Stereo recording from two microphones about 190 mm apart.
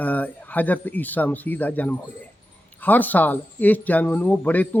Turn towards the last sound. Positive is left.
turn(degrees=10)  # may be behind; listen again after turning